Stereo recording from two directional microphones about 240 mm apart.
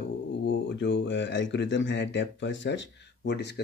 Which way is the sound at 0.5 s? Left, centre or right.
Left.